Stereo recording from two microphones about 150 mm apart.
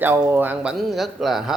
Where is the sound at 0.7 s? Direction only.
Centre (ahead or behind).